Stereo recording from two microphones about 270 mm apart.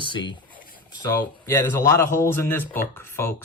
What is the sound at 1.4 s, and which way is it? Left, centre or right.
Speech, centre.